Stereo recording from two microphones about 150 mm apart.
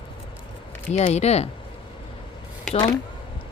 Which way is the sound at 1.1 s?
45° left (ahead or behind).